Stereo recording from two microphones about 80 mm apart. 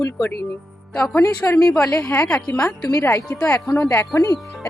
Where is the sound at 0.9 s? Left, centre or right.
Centre.